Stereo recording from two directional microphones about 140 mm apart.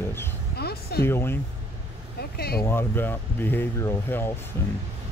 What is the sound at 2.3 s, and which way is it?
Speech, 90° left.